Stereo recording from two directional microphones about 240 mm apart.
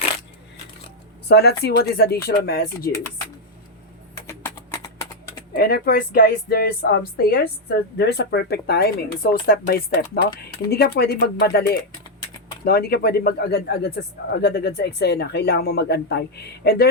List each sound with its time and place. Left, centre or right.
1.3 s speech: left
5.5 s speech: left